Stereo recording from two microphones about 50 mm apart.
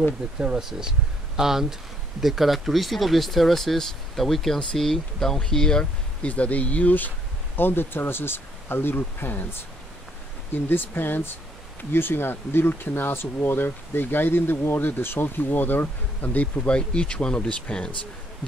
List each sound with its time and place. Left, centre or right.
0.4 s speech: centre
6.2 s speech: left
7.5 s speech: left; by 17.9 s centre